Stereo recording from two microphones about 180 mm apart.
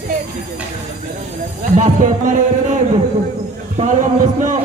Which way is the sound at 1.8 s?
45° right (ahead or behind).